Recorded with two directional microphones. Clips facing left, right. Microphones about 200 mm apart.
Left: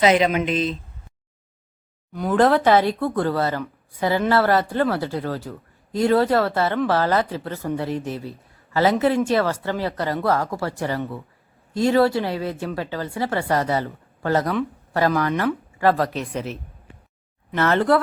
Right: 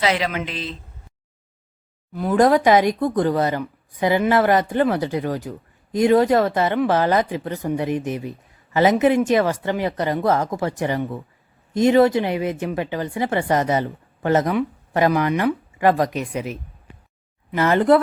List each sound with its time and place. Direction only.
0.0 s speech: 20° left (ahead or behind)
2.1 s speech: centre (ahead or behind)
2.4 s speech: 15° right (ahead or behind)